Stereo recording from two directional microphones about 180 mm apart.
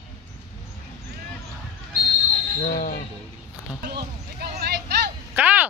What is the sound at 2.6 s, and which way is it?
Speech, 55° left (ahead or behind).